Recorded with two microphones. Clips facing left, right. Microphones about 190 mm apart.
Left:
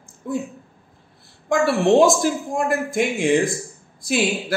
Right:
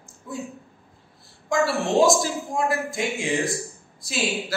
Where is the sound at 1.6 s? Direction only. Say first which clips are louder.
Left 5 dB; 55° left (ahead or behind).